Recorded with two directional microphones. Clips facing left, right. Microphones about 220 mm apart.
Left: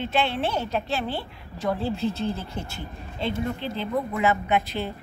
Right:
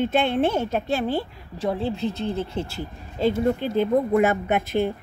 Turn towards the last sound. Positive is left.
turn(degrees=-50)  # may be behind; listen again after turning